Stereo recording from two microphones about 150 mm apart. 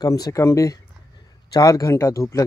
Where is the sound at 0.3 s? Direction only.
20° left (ahead or behind).